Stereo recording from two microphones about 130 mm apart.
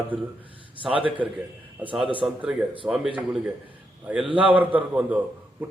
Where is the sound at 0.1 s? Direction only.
10° right (ahead or behind).